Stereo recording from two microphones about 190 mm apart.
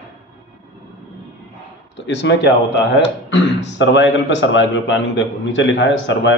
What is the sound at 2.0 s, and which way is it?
A man's voice, 70° left (ahead or behind).